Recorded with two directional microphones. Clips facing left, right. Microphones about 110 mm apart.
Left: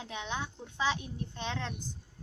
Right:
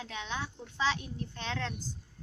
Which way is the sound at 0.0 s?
20° left (ahead or behind).